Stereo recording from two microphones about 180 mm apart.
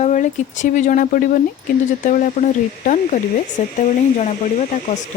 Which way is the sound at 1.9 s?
45° left (ahead or behind).